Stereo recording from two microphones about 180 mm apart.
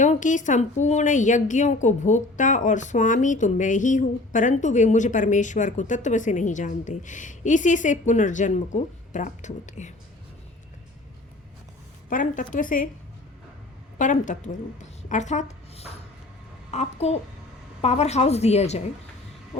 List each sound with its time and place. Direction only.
0.0 s a woman's voice: 45° left (ahead or behind)
12.0 s a woman's voice: 45° left (ahead or behind)
14.0 s a woman's voice: 45° left (ahead or behind)